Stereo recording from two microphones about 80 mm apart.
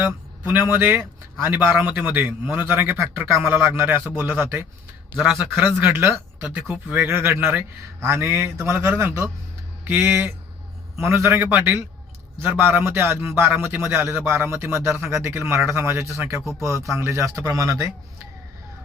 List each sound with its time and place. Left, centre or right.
0.0 s a man's voice: right
5.1 s speech: centre
5.6 s a man's voice: right